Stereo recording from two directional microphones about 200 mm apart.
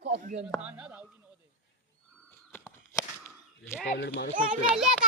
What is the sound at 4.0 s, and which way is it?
Speech, 65° left (ahead or behind).